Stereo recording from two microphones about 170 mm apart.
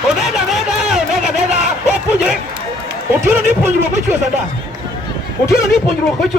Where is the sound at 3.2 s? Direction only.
15° right (ahead or behind).